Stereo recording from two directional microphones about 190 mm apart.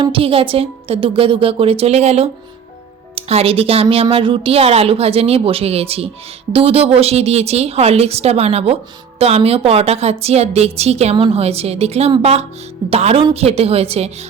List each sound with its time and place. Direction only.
0.0 s a woman's voice: 30° right (ahead or behind)